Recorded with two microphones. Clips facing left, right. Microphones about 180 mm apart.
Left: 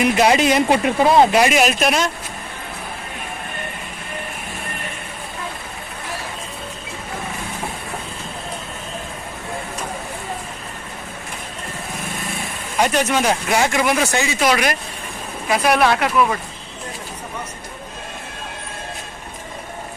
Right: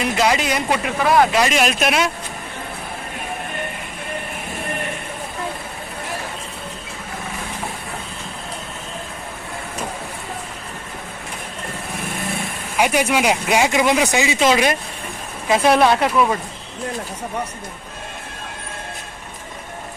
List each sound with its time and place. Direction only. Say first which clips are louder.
0.0 s speech: left 4 dB; 20° left (ahead or behind)
1.5 s speech: left 2 dB; centre (ahead or behind)
12.7 s speech: even; 10° right (ahead or behind)